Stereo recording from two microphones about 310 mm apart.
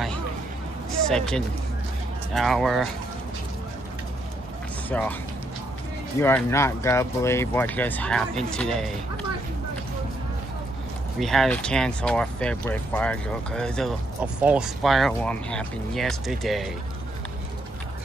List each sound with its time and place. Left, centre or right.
1.0 s speech: centre
4.8 s speech: centre
6.1 s speech: centre
11.1 s speech: centre